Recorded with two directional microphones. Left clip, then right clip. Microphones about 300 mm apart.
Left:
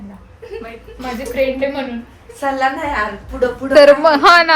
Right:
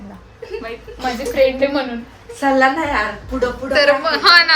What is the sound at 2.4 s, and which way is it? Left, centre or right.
Speech, right.